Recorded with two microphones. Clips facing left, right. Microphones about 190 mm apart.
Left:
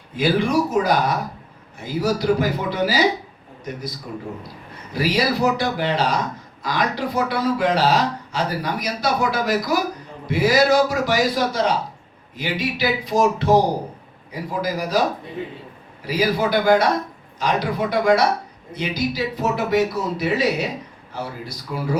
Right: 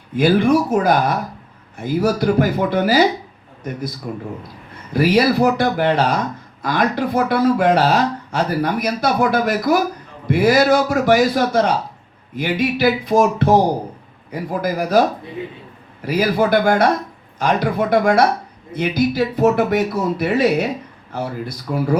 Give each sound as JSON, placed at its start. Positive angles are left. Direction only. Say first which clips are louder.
{"t": 0.2, "sound": "speech", "louder": "right 5 dB", "side_deg": -55}
{"t": 4.9, "sound": "speech", "louder": "right 6 dB", "side_deg": -55}
{"t": 16.0, "sound": "a man's voice", "louder": "right 4 dB", "side_deg": -55}